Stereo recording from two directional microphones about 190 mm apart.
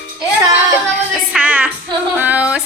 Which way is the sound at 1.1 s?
5° right (ahead or behind).